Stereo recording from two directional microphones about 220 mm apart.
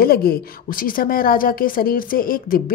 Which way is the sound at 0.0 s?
45° left (ahead or behind).